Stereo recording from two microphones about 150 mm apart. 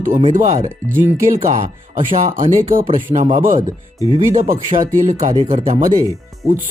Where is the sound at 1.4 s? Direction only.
45° right (ahead or behind).